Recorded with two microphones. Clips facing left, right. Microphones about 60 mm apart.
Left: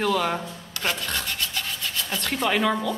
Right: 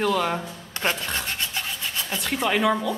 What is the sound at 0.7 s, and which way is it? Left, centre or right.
Rub, right.